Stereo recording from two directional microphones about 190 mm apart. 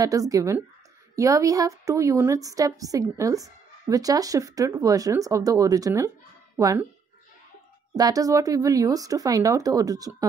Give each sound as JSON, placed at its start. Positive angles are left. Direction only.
{"t": 0.0, "sound": "a woman's voice", "side_deg": -20}
{"t": 7.9, "sound": "speech", "side_deg": -20}